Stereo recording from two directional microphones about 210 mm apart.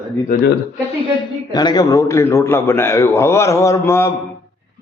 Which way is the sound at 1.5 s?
20° left (ahead or behind).